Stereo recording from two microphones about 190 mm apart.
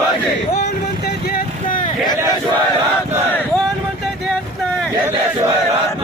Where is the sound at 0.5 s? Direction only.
55° left (ahead or behind).